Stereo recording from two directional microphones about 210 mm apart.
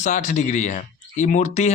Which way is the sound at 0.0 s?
35° left (ahead or behind).